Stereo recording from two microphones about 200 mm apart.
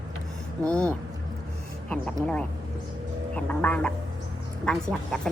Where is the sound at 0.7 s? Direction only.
5° left (ahead or behind).